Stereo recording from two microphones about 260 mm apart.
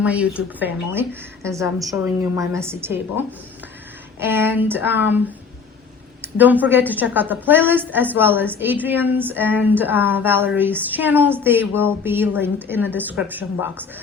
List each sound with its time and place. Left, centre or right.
0.0 s a woman's voice: centre
6.2 s a woman's voice: centre